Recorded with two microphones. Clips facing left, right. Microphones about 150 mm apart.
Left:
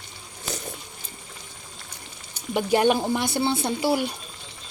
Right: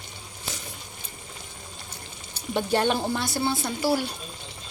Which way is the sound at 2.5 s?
10° left (ahead or behind).